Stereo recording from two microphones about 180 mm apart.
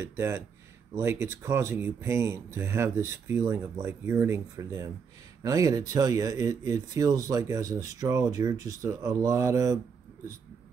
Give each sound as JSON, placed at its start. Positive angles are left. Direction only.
{"t": 0.0, "sound": "speech", "side_deg": -15}